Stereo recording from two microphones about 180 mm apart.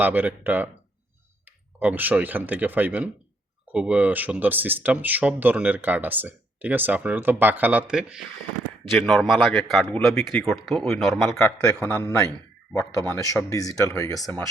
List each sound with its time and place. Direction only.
0.0 s speech: 10° right (ahead or behind)
11.4 s speech: 15° left (ahead or behind)